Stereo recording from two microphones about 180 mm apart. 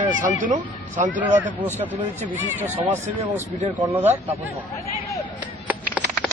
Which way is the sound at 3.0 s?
40° right (ahead or behind).